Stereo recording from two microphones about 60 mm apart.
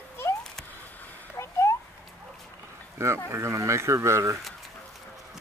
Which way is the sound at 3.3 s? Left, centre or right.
Right.